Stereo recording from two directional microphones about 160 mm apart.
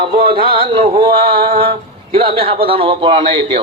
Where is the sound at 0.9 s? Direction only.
35° right (ahead or behind).